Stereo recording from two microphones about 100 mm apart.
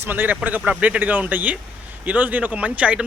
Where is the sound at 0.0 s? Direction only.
20° right (ahead or behind).